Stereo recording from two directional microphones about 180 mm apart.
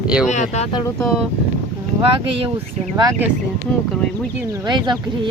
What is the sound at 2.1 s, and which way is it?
Speech, 30° right (ahead or behind).